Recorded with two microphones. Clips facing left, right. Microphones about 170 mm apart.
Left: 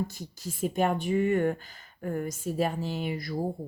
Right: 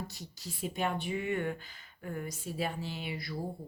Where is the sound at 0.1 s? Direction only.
50° left (ahead or behind).